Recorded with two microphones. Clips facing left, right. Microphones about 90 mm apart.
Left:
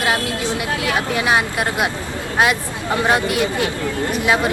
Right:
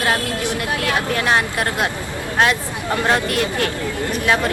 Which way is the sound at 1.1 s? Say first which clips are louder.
Left 1 dB; 10° left (ahead or behind).